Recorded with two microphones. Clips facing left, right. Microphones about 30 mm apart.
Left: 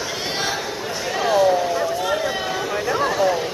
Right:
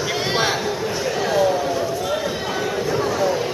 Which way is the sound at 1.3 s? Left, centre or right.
Centre.